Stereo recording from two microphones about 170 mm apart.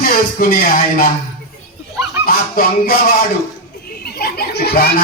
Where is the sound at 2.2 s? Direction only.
60° left (ahead or behind).